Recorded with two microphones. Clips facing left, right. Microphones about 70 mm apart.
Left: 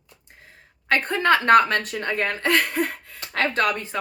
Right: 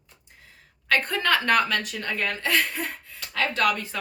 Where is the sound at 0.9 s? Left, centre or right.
Left.